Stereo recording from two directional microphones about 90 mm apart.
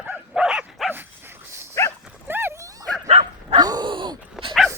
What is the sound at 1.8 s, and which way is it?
Dog, 35° left (ahead or behind).